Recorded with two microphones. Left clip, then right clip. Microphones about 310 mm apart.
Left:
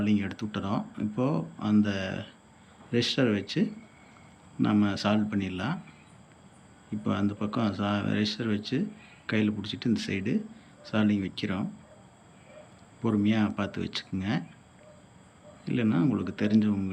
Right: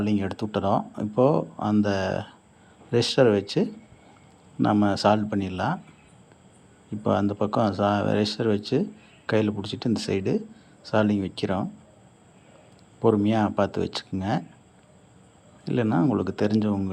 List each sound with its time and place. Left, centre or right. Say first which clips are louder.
0.0 s speech: right 3 dB; centre
7.0 s speech: right 8 dB; centre
13.0 s speech: right 7 dB; centre
15.6 s speech: right 4 dB; centre